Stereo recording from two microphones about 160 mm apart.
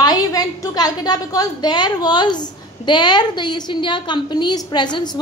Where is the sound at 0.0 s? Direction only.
25° left (ahead or behind).